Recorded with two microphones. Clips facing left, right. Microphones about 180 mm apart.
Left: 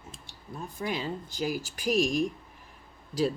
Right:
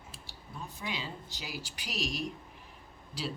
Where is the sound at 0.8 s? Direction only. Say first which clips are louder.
Left 8 dB; 50° left (ahead or behind).